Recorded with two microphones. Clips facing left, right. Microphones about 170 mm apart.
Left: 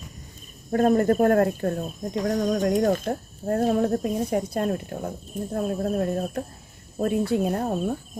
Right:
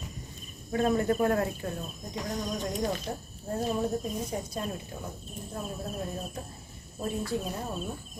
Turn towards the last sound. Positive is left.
turn(degrees=60)  # may be behind; listen again after turning